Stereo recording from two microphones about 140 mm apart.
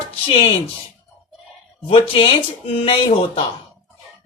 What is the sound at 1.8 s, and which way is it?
Speech, 40° left (ahead or behind).